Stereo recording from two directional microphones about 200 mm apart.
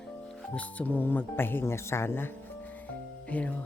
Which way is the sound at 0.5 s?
5° left (ahead or behind).